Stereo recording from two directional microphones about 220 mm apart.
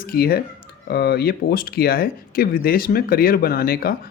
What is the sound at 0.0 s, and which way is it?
Speech, 40° left (ahead or behind).